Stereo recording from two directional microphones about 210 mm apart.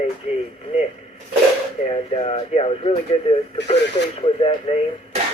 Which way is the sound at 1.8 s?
30° left (ahead or behind).